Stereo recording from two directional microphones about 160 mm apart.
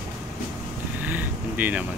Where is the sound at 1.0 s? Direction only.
10° right (ahead or behind).